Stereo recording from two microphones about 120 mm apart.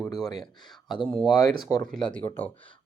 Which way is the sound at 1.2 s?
40° left (ahead or behind).